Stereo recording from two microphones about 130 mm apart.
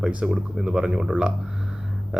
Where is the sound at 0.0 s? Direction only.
5° right (ahead or behind).